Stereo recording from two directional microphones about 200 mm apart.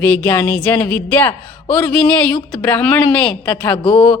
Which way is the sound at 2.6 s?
5° left (ahead or behind).